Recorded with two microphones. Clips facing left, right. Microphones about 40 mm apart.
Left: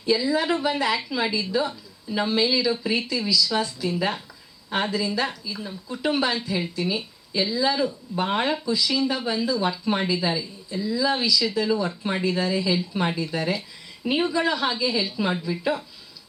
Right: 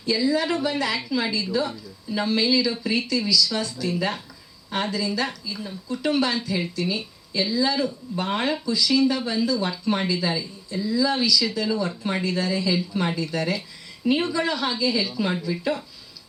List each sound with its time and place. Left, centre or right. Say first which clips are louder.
0.0 s speech: even; centre